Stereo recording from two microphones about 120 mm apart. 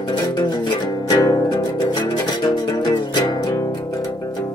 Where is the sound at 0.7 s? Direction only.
35° left (ahead or behind).